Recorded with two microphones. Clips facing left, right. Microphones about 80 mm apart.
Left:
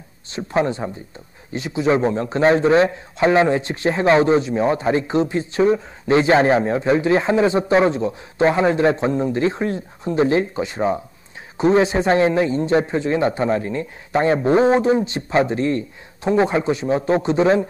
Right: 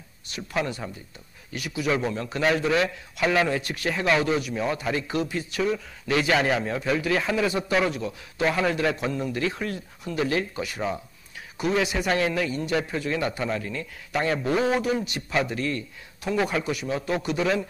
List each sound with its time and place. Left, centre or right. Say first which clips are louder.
0.3 s a man's voice: left 8 dB; left